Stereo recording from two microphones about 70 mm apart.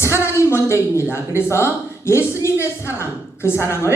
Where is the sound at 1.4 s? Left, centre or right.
Left.